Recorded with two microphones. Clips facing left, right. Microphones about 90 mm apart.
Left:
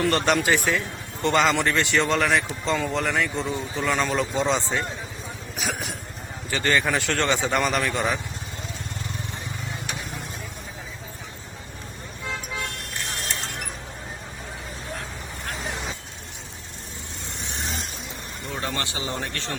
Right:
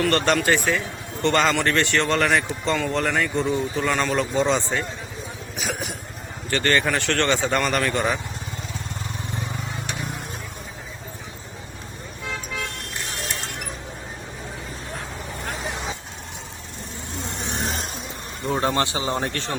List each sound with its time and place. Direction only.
0.1 s speech: 5° left (ahead or behind)
18.4 s vehicle: 35° right (ahead or behind)
19.1 s speech: 35° right (ahead or behind)